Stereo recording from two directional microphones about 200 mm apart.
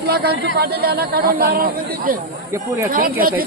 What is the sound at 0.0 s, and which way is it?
Speech, 50° right (ahead or behind).